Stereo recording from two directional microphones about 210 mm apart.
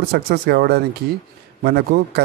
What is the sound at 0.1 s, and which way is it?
Speech, 50° right (ahead or behind).